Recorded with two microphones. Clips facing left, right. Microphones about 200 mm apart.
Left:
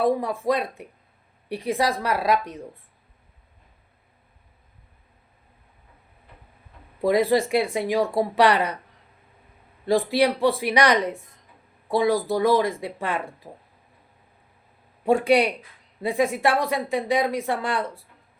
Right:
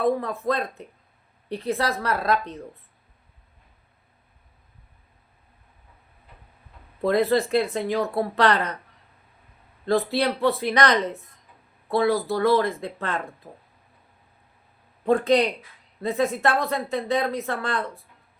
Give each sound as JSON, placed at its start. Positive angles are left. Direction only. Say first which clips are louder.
{"t": 0.0, "sound": "a woman's voice", "louder": "left 1 dB", "side_deg": 10}
{"t": 7.0, "sound": "a woman's voice", "louder": "left 1 dB", "side_deg": 10}
{"t": 9.8, "sound": "a woman's voice", "louder": "left 2 dB", "side_deg": 10}
{"t": 15.0, "sound": "a woman's voice", "louder": "left 1 dB", "side_deg": 10}